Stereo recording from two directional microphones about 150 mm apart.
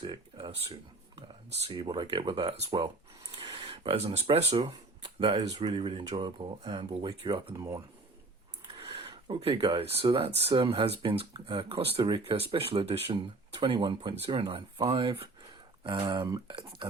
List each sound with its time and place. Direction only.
0.0 s speech: 30° right (ahead or behind)
2.8 s a sound: 25° right (ahead or behind)
3.8 s speech: 45° right (ahead or behind)
5.4 s speech: 25° right (ahead or behind)
7.5 s speech: 20° right (ahead or behind)
8.8 s speech: 35° right (ahead or behind)